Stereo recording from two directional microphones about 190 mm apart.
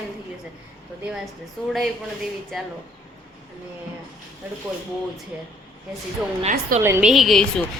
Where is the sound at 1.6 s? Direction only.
5° left (ahead or behind).